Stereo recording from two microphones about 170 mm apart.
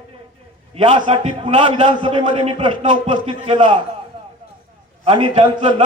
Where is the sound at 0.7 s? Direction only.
30° right (ahead or behind).